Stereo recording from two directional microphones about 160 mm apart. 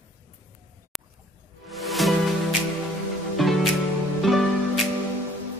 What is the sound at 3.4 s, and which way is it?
Music, centre (ahead or behind).